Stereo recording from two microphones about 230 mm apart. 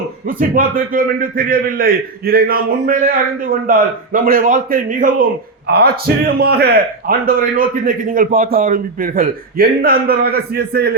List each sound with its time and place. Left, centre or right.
0.3 s a man's voice: right